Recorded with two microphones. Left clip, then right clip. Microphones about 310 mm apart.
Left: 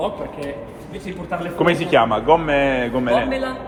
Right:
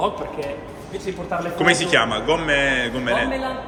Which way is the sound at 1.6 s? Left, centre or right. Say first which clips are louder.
Left 1 dB; centre.